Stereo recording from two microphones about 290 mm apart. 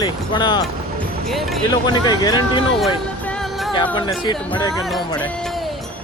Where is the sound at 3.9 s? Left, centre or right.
Centre.